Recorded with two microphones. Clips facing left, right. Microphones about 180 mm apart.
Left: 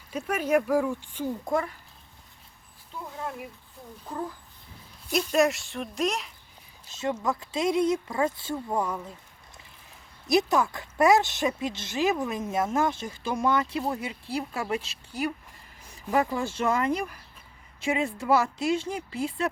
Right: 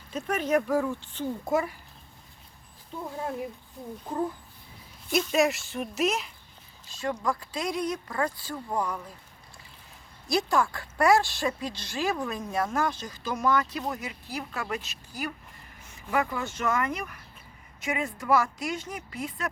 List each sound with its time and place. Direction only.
0.1 s speech: 10° left (ahead or behind)
1.5 s speech: 5° right (ahead or behind)
5.1 s speech: centre (ahead or behind)
6.8 s speech: 20° left (ahead or behind)
10.2 s speech: 20° left (ahead or behind)